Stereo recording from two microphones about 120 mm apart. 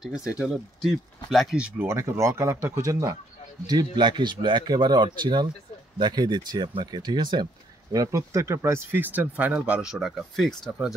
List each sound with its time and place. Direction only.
0.0 s speech: 5° right (ahead or behind)
1.9 s speech: 25° right (ahead or behind); by 11.0 s centre (ahead or behind)